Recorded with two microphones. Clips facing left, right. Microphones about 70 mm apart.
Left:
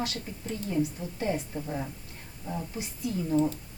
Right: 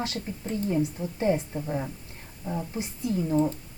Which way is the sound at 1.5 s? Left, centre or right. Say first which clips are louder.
Right 3 dB; centre.